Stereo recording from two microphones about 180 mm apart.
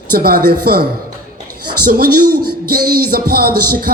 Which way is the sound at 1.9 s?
55° right (ahead or behind).